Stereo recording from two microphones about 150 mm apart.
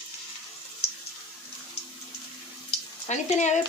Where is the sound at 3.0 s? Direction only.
50° left (ahead or behind).